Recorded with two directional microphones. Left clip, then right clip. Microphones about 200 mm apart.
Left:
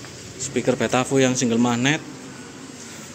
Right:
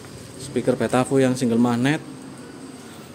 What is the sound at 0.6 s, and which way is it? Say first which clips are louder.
A man's voice: even; 10° right (ahead or behind).